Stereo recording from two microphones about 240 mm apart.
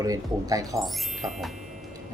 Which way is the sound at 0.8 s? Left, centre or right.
Centre.